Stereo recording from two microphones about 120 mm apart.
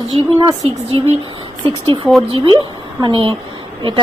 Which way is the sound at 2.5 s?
40° right (ahead or behind).